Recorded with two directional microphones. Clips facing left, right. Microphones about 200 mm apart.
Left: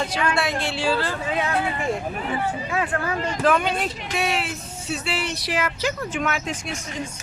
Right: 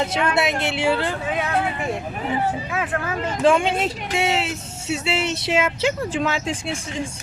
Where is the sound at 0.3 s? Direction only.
20° right (ahead or behind).